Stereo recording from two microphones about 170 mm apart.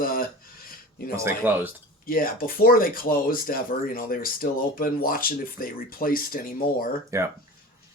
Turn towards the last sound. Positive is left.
turn(degrees=-15)  # may be behind; listen again after turning